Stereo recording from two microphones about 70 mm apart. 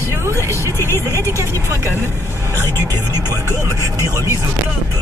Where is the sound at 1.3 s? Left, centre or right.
Right.